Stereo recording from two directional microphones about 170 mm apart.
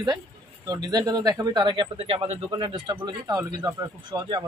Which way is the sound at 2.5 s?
25° right (ahead or behind).